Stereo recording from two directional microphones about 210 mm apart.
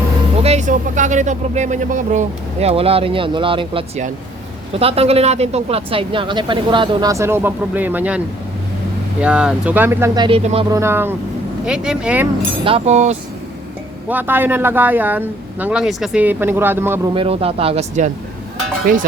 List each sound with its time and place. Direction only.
0.4 s speech: 35° right (ahead or behind); by 8.2 s 10° right (ahead or behind)
9.2 s a man's voice: 5° right (ahead or behind)
10.2 s speech: 25° right (ahead or behind)
10.7 s a man's voice: 15° right (ahead or behind)
12.6 s speech: 30° right (ahead or behind)
14.1 s a man's voice: 10° right (ahead or behind)
17.2 s speech: 25° right (ahead or behind)